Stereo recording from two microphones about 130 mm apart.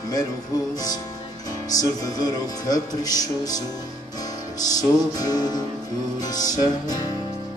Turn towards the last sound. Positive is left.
turn(degrees=30)  # may be behind; listen again after turning